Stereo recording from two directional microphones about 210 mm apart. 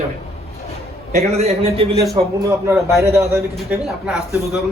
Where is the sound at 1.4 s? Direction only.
30° right (ahead or behind).